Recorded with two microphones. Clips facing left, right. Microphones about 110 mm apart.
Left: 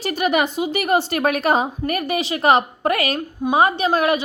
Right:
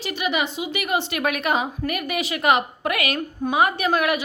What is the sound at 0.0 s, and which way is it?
A woman's voice, 45° left (ahead or behind).